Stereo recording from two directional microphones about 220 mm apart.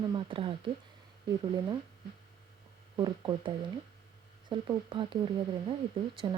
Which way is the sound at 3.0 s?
20° right (ahead or behind).